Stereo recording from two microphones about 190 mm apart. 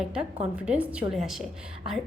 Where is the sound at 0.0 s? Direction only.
5° right (ahead or behind).